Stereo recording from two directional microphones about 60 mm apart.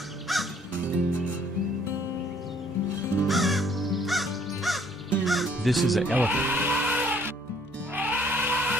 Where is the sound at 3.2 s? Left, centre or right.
Centre.